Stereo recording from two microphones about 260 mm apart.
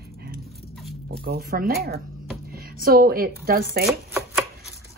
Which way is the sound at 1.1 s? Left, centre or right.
Right.